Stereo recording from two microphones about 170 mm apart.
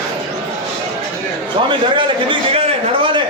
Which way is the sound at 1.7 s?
30° right (ahead or behind).